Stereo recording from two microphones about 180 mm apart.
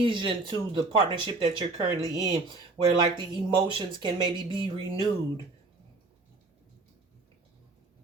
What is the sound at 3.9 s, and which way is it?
Speech, 25° right (ahead or behind).